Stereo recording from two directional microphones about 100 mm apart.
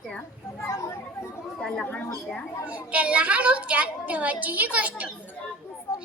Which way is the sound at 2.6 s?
15° right (ahead or behind).